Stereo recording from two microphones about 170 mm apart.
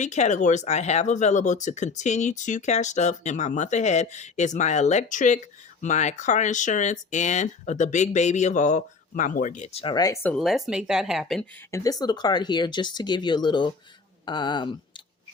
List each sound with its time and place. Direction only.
0.0 s speech: 45° left (ahead or behind); by 10.2 s 25° left (ahead or behind)
10.2 s speech: centre (ahead or behind)
11.7 s speech: 20° left (ahead or behind)